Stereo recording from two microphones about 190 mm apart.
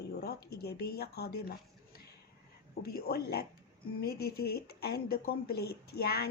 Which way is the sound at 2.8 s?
55° left (ahead or behind).